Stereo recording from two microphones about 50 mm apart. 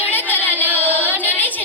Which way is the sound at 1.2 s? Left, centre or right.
Left.